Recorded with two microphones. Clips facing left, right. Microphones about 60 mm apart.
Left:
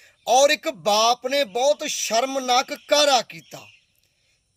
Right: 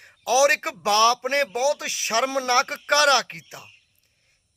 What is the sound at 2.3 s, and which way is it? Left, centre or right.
Speech, right.